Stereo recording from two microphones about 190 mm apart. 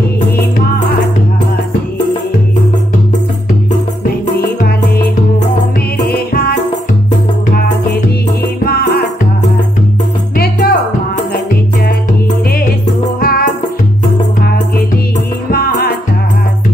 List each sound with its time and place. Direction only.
4.4 s music: 55° left (ahead or behind)
6.0 s music: 50° left (ahead or behind)
10.3 s music: 55° left (ahead or behind)
13.2 s music: 50° left (ahead or behind)
15.5 s music: 55° left (ahead or behind)